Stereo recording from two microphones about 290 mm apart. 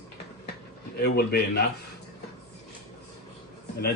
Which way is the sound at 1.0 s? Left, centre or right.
Left.